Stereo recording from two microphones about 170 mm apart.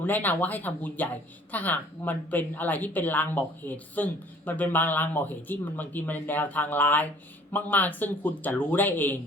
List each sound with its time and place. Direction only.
0.0 s speech: 10° left (ahead or behind)